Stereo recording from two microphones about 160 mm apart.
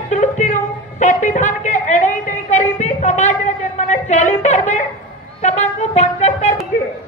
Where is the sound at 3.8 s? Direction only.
45° left (ahead or behind).